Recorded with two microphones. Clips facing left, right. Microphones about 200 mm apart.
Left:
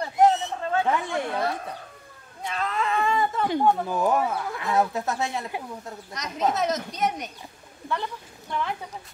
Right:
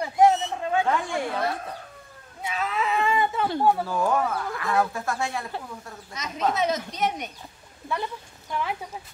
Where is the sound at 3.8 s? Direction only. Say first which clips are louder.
Left 1 dB; 20° left (ahead or behind).